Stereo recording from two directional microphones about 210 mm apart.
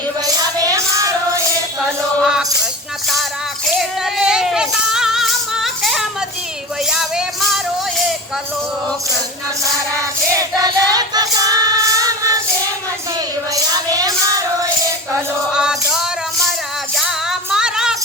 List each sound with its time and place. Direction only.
0.4 s music: 15° right (ahead or behind)
2.2 s music: centre (ahead or behind)
3.7 s music: centre (ahead or behind)
10.3 s choir: 15° right (ahead or behind)
13.7 s music: 20° right (ahead or behind)
15.5 s music: 5° right (ahead or behind)